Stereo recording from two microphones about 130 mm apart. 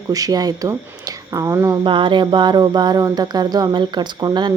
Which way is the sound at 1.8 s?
40° right (ahead or behind).